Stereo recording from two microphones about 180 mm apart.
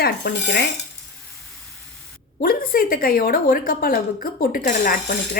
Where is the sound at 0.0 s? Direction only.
65° left (ahead or behind).